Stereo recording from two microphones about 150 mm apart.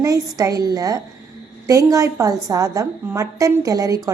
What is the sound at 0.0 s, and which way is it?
A woman's voice, 25° right (ahead or behind).